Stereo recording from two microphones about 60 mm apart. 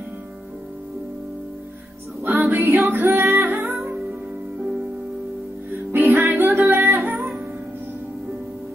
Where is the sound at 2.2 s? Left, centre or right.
Right.